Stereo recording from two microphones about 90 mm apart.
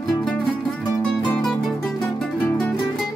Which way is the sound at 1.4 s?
Centre (ahead or behind).